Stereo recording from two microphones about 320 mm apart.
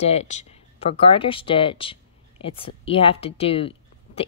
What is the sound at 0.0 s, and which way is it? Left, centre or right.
Speech, centre.